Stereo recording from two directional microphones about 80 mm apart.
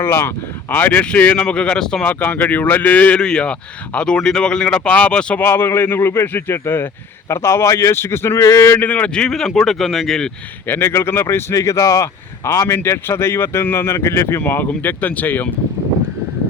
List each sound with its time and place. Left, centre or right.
0.0 s speech: left; by 2.1 s centre
2.1 s speech: left
5.4 s speech: left
8.8 s speech: centre
10.7 s speech: left